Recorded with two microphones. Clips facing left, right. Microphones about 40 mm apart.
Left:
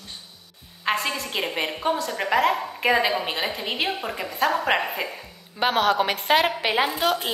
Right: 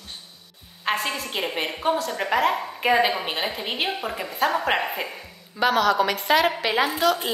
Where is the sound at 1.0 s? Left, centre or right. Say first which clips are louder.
Even; centre.